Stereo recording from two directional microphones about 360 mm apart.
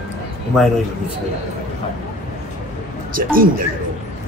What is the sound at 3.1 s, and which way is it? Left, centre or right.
Speech, right.